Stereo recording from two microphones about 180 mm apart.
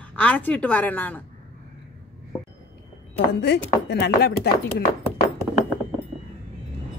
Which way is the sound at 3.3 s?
65° left (ahead or behind).